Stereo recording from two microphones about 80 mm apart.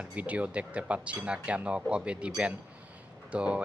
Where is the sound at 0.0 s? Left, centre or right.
Centre.